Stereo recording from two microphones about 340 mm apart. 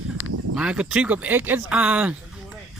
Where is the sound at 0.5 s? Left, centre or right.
Centre.